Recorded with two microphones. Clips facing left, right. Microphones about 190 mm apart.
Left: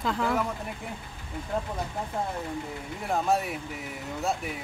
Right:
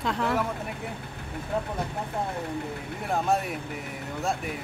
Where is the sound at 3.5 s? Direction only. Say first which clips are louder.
Right 2 dB; 60° right (ahead or behind).